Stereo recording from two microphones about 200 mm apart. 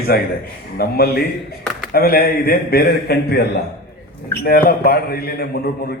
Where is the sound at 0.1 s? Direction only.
50° left (ahead or behind).